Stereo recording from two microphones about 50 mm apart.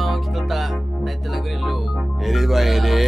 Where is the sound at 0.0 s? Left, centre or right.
Centre.